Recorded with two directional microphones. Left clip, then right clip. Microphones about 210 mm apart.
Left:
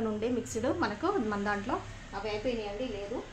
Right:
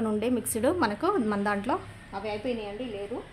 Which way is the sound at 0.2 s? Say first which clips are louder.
Right 5 dB; 55° right (ahead or behind).